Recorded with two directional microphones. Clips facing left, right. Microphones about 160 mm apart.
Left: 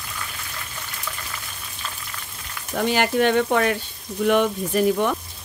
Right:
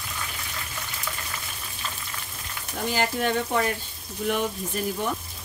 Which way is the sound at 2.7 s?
75° left (ahead or behind).